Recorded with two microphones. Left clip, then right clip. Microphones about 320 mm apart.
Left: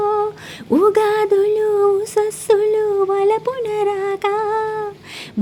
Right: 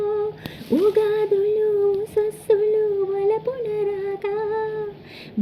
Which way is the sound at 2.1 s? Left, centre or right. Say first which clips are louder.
Left 4 dB; left.